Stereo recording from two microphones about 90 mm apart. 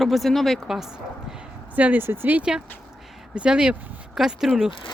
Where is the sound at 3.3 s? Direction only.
10° right (ahead or behind).